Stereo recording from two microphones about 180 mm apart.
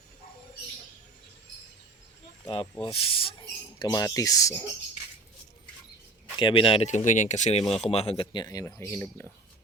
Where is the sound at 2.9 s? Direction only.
30° left (ahead or behind).